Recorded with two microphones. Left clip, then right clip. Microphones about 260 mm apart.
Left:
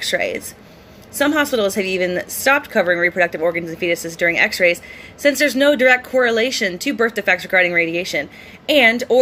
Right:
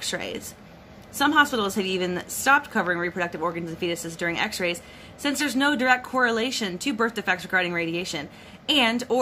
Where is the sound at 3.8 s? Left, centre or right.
Centre.